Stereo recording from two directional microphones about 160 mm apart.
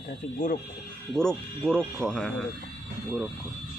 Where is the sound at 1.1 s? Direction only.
5° left (ahead or behind).